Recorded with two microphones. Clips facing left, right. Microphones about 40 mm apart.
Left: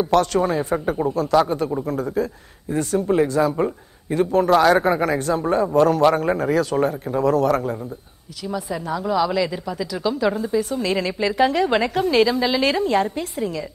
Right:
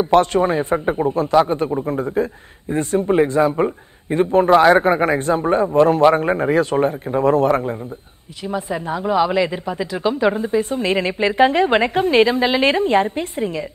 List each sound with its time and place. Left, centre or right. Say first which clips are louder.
0.0 s a man's voice: right 3 dB; right